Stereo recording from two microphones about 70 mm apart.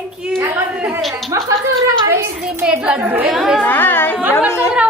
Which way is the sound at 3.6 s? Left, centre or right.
Left.